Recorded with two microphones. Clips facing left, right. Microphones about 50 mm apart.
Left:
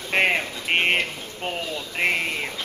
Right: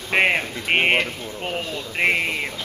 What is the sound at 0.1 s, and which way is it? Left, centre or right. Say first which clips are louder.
Speech: right 2 dB; centre.